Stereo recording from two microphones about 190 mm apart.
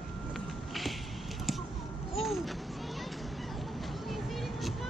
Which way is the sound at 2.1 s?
Centre (ahead or behind).